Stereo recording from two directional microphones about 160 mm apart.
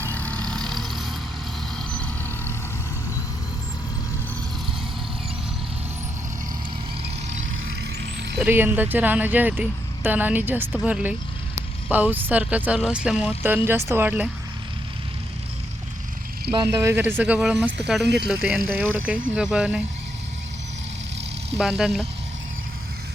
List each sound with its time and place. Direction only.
0.0 s vehicle: 10° left (ahead or behind)
8.4 s speech: 10° right (ahead or behind)
16.5 s speech: 30° right (ahead or behind)
16.8 s speech: 15° right (ahead or behind)
18.0 s speech: 90° right
18.3 s speech: 5° right (ahead or behind)
21.6 s speech: centre (ahead or behind)